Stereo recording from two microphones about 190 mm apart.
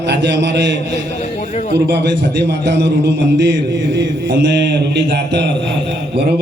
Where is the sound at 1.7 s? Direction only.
65° right (ahead or behind).